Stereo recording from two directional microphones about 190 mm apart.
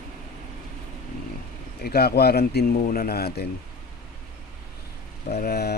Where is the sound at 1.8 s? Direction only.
55° left (ahead or behind).